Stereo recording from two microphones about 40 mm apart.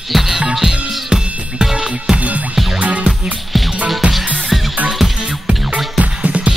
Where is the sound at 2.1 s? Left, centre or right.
Right.